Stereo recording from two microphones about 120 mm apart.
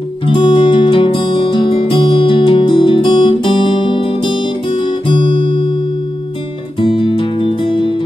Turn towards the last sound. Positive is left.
turn(degrees=45)  # may be behind; listen again after turning